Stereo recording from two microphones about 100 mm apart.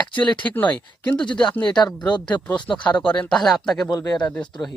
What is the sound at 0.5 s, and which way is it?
Speech, 15° left (ahead or behind).